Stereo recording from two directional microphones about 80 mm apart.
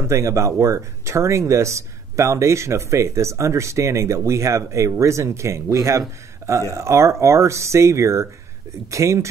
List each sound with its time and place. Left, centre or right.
0.1 s speech: right